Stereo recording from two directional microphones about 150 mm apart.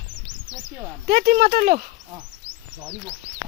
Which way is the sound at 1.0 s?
90° right.